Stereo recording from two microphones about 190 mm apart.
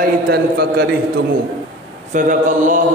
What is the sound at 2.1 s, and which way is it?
Speech, 40° right (ahead or behind).